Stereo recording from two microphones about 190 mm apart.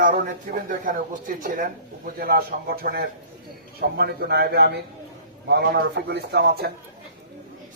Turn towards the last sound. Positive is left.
turn(degrees=-55)  # may be behind; listen again after turning